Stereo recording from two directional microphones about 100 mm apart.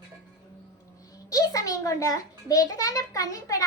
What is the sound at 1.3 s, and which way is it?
A child's voice, 35° left (ahead or behind).